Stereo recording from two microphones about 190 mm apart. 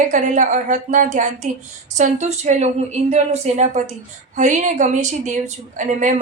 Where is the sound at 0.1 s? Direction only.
40° right (ahead or behind).